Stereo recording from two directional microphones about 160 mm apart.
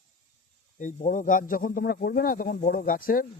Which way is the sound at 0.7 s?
55° left (ahead or behind).